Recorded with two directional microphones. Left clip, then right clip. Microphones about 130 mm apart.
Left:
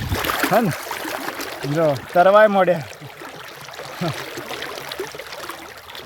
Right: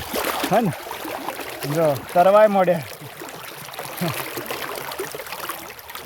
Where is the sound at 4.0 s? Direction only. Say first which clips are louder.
Even; 70° right (ahead or behind); by 5.1 s 55° right (ahead or behind).